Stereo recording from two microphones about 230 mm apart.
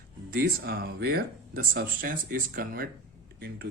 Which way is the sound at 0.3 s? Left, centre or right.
Right.